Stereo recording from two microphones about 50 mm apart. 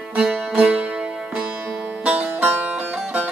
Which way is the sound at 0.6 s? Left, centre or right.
Right.